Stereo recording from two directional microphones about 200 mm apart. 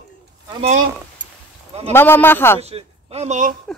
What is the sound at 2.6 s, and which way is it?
Speech, 30° right (ahead or behind).